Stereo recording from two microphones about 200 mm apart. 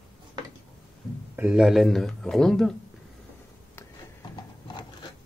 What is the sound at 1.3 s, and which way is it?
Speech, 5° right (ahead or behind).